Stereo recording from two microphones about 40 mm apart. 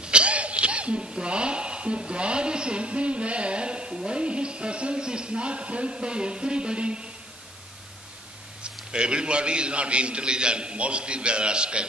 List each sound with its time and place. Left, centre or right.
0.0 s laughter: right
1.0 s a woman's voice: right
8.9 s a woman's voice: right